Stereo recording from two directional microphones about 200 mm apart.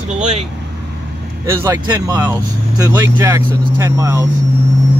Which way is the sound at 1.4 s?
15° right (ahead or behind).